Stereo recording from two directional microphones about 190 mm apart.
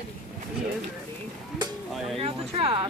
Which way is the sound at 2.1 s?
30° right (ahead or behind).